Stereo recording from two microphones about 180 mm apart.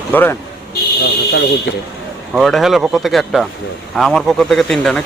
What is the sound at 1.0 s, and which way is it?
Fire alarm, 70° left (ahead or behind).